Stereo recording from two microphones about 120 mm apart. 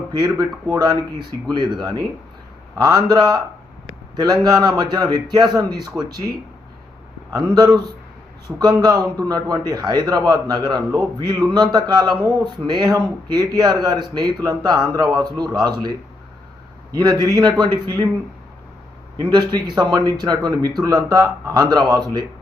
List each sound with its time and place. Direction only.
0.1 s speech: 30° right (ahead or behind)
7.3 s speech: 35° right (ahead or behind)
16.9 s speech: 30° right (ahead or behind)
19.2 s speech: 40° right (ahead or behind)